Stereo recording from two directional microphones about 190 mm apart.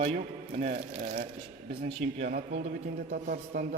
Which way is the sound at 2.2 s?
55° right (ahead or behind).